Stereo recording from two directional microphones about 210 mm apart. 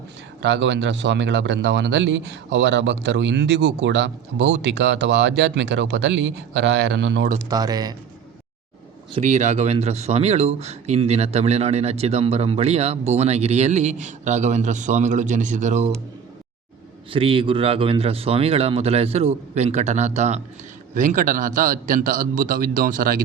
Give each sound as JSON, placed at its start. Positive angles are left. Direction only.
{"t": 0.4, "sound": "speech", "side_deg": -60}
{"t": 7.5, "sound": "speech", "side_deg": -20}
{"t": 9.1, "sound": "speech", "side_deg": -35}
{"t": 17.1, "sound": "speech", "side_deg": -25}